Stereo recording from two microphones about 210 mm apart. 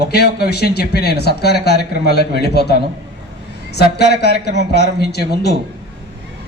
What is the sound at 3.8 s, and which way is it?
A man's voice, 50° left (ahead or behind).